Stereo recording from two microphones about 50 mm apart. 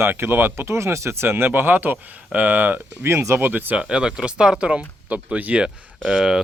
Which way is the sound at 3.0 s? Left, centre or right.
Right.